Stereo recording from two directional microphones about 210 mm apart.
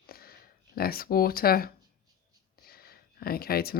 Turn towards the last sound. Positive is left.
turn(degrees=45)  # may be behind; listen again after turning